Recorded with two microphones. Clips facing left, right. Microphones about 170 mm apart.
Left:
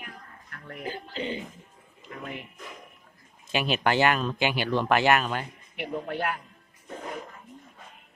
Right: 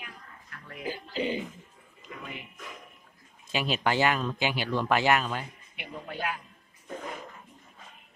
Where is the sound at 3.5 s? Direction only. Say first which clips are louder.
Left 3 dB; 65° left (ahead or behind).